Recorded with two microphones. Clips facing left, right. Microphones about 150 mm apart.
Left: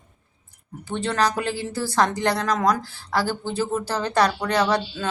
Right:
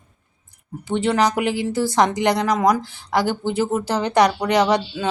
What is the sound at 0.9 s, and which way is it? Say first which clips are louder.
Speech: right 4 dB; 15° right (ahead or behind).